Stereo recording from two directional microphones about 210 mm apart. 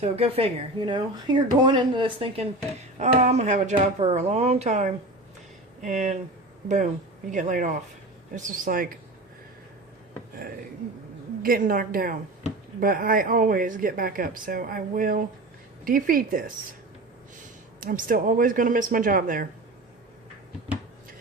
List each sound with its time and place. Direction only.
0.0 s speech: 30° right (ahead or behind)
7.3 s speech: 35° right (ahead or behind)
11.4 s a woman's voice: 45° right (ahead or behind)
17.7 s speech: 40° right (ahead or behind)